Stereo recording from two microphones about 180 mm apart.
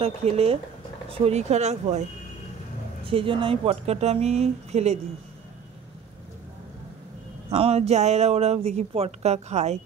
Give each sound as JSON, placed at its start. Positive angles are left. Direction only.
{"t": 0.0, "sound": "speech", "side_deg": -35}
{"t": 3.1, "sound": "speech", "side_deg": -30}
{"t": 7.4, "sound": "speech", "side_deg": -35}